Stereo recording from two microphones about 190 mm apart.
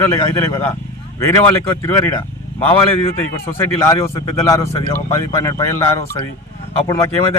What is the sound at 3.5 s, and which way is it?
A man's voice, 15° left (ahead or behind).